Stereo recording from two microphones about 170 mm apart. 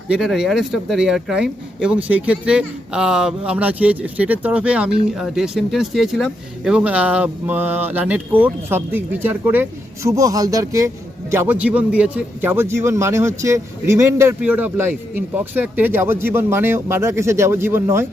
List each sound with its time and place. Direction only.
0.1 s speech: 5° right (ahead or behind)